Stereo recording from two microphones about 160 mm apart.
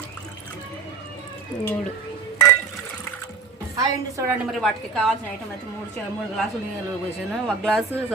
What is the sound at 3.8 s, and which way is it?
Speech, 20° right (ahead or behind).